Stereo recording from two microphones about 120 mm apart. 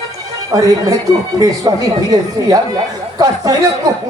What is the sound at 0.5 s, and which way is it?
Speech, 30° right (ahead or behind).